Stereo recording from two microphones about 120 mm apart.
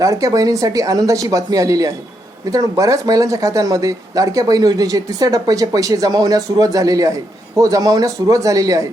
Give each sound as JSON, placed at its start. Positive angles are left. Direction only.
{"t": 0.0, "sound": "speech", "side_deg": -30}